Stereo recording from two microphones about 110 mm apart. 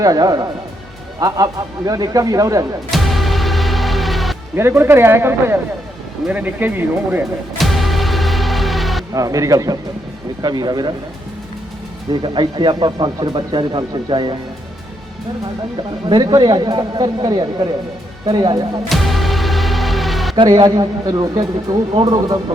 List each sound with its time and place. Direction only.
0.0 s speech: 35° right (ahead or behind)
2.9 s music: centre (ahead or behind)
4.5 s speech: 20° right (ahead or behind)
7.6 s music: centre (ahead or behind)
9.1 s speech: 30° right (ahead or behind)
12.2 s speech: 45° right (ahead or behind)
16.0 s speech: 40° right (ahead or behind)
18.9 s music: centre (ahead or behind)
20.3 s speech: 40° right (ahead or behind)